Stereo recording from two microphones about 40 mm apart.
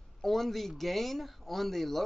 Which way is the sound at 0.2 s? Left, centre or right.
Centre.